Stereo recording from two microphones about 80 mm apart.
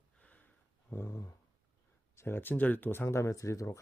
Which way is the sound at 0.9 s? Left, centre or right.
Left.